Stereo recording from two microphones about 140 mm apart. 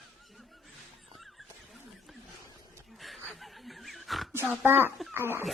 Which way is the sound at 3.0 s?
Centre (ahead or behind).